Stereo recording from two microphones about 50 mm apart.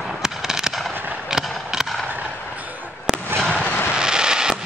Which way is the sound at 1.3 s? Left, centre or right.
Centre.